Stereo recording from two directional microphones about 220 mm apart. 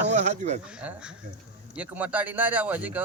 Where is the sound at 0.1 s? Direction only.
30° right (ahead or behind).